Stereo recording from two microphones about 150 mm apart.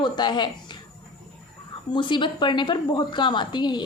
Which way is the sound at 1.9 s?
30° left (ahead or behind).